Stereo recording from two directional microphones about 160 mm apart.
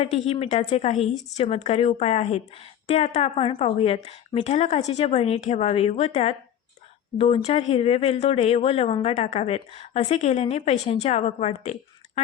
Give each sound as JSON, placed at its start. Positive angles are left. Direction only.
{"t": 0.0, "sound": "speech", "side_deg": 40}